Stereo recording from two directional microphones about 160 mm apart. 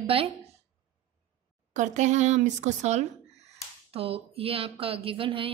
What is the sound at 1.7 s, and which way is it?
A woman's voice, 50° right (ahead or behind).